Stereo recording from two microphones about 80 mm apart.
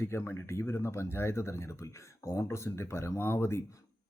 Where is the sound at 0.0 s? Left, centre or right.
Left.